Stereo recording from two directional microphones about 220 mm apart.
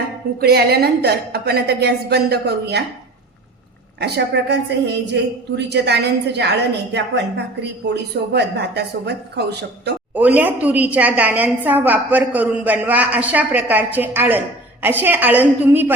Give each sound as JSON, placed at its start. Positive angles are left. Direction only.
{"t": 0.3, "sound": "a woman's voice", "side_deg": -45}
{"t": 4.0, "sound": "a woman's voice", "side_deg": -50}
{"t": 10.2, "sound": "a woman's voice", "side_deg": -5}